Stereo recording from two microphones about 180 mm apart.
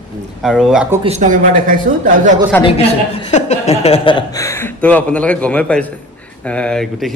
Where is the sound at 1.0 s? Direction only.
40° right (ahead or behind).